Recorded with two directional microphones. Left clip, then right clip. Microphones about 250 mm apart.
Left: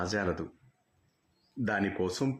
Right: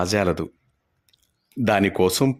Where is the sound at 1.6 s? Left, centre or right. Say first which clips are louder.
Right 12 dB; right.